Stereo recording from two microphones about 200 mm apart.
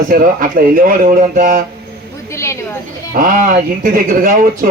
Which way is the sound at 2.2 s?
15° left (ahead or behind).